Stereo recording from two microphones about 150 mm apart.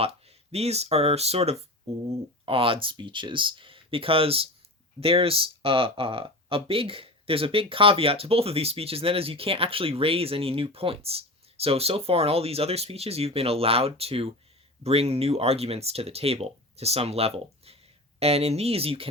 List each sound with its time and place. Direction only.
0.0 s speech: 40° right (ahead or behind)